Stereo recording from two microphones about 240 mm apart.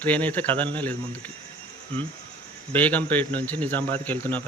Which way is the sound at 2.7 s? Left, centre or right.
Centre.